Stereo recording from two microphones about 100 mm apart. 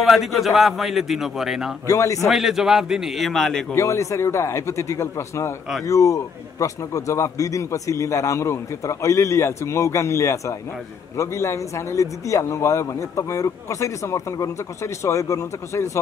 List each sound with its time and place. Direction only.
0.0 s a man's voice: centre (ahead or behind)
1.9 s a man's voice: 30° left (ahead or behind)
2.1 s a man's voice: centre (ahead or behind)
3.7 s a man's voice: 30° left (ahead or behind)